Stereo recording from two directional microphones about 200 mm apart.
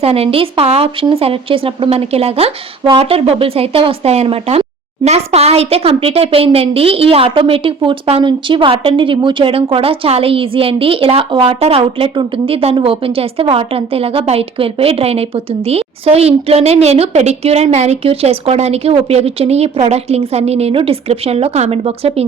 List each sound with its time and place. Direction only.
0.0 s speech: 30° right (ahead or behind)